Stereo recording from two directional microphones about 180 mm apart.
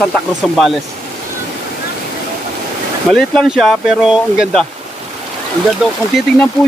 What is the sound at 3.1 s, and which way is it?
Speech, centre (ahead or behind).